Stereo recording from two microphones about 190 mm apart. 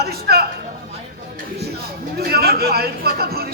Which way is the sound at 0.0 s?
55° right (ahead or behind).